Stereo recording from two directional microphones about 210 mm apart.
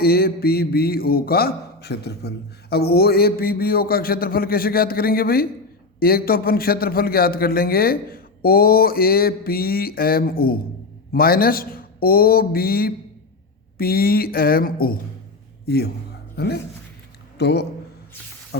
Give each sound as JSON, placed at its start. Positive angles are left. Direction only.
{"t": 0.0, "sound": "a man's voice", "side_deg": 45}